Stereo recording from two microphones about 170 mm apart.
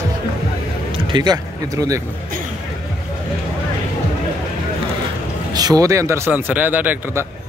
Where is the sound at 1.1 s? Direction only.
25° right (ahead or behind).